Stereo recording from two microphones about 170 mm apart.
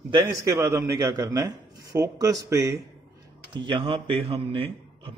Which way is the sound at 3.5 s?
30° right (ahead or behind).